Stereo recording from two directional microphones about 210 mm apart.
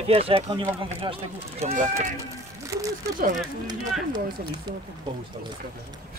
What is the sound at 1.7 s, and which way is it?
Speech, 40° right (ahead or behind).